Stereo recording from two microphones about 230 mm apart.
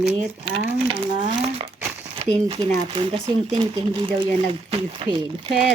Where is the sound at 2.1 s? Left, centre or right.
Right.